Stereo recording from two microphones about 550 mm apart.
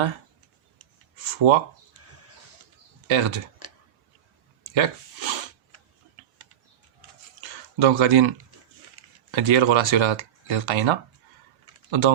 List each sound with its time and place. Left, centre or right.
1.2 s speech: right
3.1 s speech: right
4.7 s a sound: right
7.4 s speech: right